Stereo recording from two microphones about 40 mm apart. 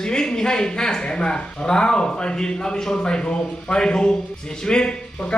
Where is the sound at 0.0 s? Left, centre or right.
Centre.